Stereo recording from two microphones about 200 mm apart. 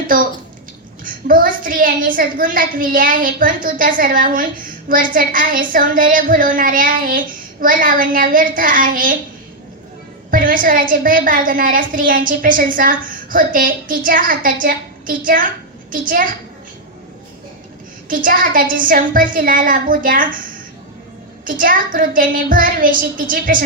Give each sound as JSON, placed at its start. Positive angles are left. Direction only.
{"t": 1.0, "sound": "a woman's voice", "side_deg": -45}
{"t": 10.3, "sound": "a woman's voice", "side_deg": -45}
{"t": 18.1, "sound": "a woman's voice", "side_deg": -45}
{"t": 21.6, "sound": "a woman's voice", "side_deg": -45}